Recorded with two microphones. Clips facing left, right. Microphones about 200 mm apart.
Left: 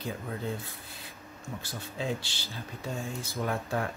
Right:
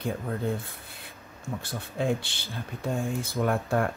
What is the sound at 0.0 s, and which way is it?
Speech, 55° right (ahead or behind).